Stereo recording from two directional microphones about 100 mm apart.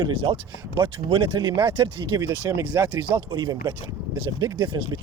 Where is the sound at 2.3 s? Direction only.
20° right (ahead or behind).